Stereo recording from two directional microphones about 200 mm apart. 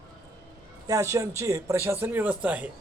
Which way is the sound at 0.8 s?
15° right (ahead or behind).